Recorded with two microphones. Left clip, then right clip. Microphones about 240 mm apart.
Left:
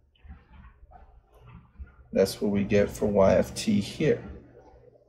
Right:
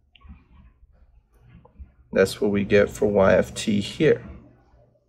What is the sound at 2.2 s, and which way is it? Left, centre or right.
Speech, centre.